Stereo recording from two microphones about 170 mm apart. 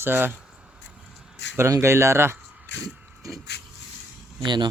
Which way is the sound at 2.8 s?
20° right (ahead or behind).